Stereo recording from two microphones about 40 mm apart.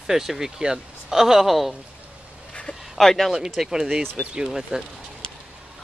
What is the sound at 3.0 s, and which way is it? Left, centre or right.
Speech, centre.